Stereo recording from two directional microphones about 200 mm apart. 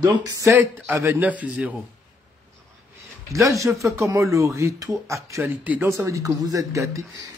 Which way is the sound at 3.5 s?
15° right (ahead or behind).